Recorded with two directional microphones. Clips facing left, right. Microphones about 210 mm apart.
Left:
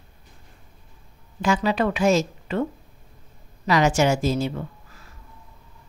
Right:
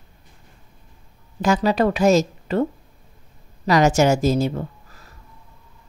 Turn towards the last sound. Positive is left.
turn(degrees=-40)  # may be behind; listen again after turning